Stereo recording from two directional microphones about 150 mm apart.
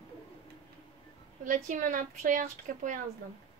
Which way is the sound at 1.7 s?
65° right (ahead or behind).